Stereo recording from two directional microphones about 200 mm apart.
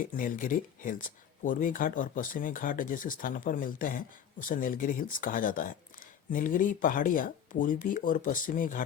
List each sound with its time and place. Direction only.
0.0 s speech: 45° left (ahead or behind)